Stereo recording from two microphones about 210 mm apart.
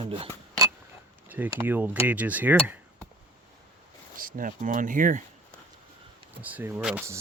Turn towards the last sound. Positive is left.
turn(degrees=-10)  # may be behind; listen again after turning